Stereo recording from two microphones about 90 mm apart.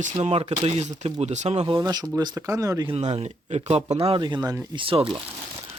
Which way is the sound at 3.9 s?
90° right.